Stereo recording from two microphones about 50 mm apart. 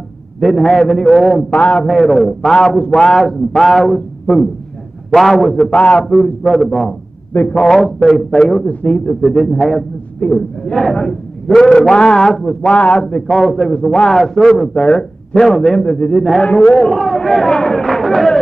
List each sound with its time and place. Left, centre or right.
0.4 s a man's voice: centre
1.5 s speech: left
1.9 s a man's voice: centre
2.5 s a man's voice: centre
5.6 s speech: left
6.0 s a man's voice: centre
8.4 s speech: centre
9.0 s a man's voice: centre
12.7 s speech: left
13.1 s a man's voice: centre
14.7 s a man's voice: left
15.4 s a man's voice: centre